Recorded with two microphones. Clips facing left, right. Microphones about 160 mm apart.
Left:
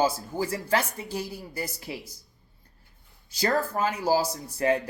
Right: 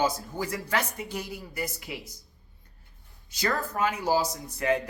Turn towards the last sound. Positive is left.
turn(degrees=30)  # may be behind; listen again after turning